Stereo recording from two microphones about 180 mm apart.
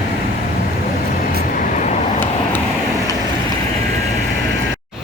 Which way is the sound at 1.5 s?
45° left (ahead or behind).